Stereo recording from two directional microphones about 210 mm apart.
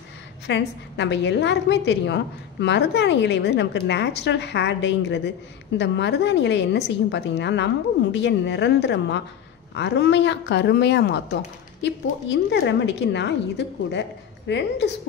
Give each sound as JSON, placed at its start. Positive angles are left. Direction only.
{"t": 0.5, "sound": "a woman's voice", "side_deg": 55}